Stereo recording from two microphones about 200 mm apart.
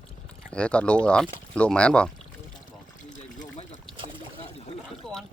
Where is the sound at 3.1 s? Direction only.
40° left (ahead or behind).